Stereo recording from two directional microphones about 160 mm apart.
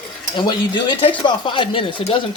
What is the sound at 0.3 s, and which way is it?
Speech, 30° left (ahead or behind).